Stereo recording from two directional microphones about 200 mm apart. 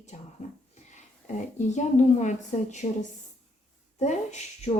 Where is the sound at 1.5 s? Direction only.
35° left (ahead or behind).